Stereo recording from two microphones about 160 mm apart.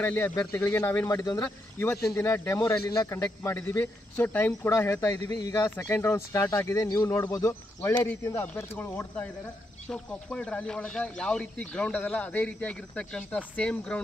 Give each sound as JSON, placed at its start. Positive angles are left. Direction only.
{"t": 0.0, "sound": "speech", "side_deg": 10}